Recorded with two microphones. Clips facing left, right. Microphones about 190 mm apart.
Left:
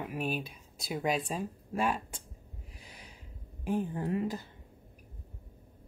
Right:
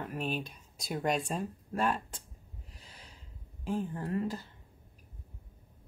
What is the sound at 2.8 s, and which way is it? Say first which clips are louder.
Gasp: left 3 dB; 15° left (ahead or behind).